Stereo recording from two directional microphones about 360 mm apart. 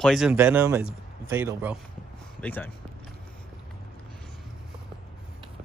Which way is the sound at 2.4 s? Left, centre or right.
Centre.